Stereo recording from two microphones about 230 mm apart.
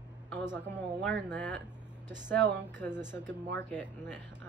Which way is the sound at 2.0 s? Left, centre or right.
Centre.